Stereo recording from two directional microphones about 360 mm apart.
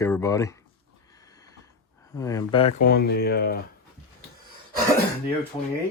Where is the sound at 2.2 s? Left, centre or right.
Centre; by 3.6 s left.